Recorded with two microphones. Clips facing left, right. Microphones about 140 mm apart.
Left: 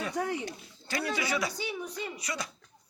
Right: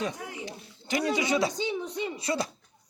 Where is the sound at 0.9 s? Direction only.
20° right (ahead or behind).